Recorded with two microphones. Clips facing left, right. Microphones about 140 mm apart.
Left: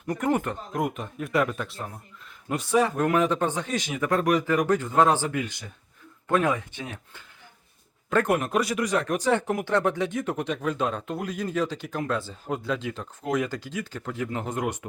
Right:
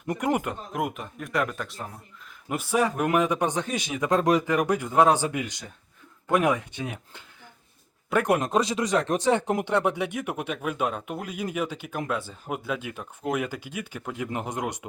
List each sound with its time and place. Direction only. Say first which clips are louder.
0.1 s speech: left 1 dB; 15° right (ahead or behind)